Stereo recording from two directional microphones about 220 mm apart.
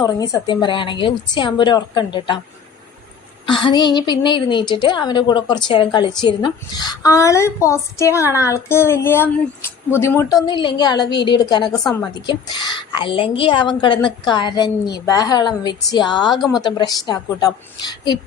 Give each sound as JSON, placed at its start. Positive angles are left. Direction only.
{"t": 0.0, "sound": "a woman's voice", "side_deg": 15}
{"t": 3.4, "sound": "a woman's voice", "side_deg": 20}
{"t": 11.8, "sound": "a woman's voice", "side_deg": 0}
{"t": 12.1, "sound": "a woman's voice", "side_deg": 20}
{"t": 16.3, "sound": "a woman's voice", "side_deg": 0}
{"t": 16.6, "sound": "a woman's voice", "side_deg": 15}